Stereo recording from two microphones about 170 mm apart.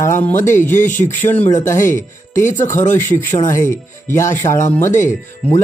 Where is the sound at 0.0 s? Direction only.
15° left (ahead or behind).